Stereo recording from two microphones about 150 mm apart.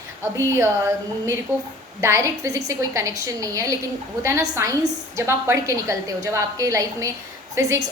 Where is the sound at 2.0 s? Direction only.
20° right (ahead or behind).